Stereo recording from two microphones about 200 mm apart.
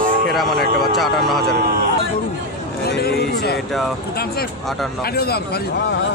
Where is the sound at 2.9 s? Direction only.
55° left (ahead or behind).